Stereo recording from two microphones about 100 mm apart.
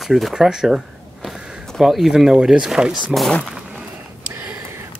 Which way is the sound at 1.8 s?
5° right (ahead or behind).